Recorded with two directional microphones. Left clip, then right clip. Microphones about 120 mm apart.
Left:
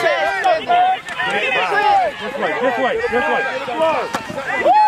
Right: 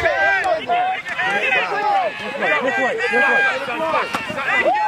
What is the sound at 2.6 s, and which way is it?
Speech, 75° left (ahead or behind).